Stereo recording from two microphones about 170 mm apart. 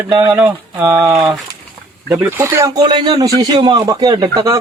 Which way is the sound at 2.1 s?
15° right (ahead or behind).